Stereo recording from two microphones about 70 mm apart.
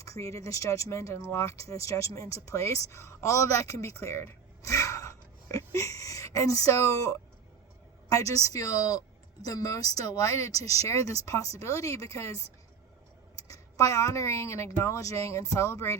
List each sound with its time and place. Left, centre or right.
0.0 s speech: left
13.5 s a woman's voice: left